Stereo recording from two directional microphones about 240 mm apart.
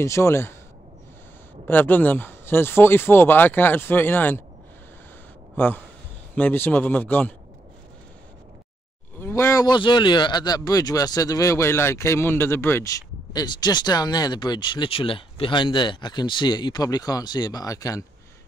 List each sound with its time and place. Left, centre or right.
0.0 s speech: centre
1.7 s speech: centre
5.6 s speech: centre
9.2 s speech: centre